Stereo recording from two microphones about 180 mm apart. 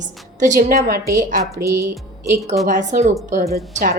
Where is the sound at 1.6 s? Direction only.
15° right (ahead or behind).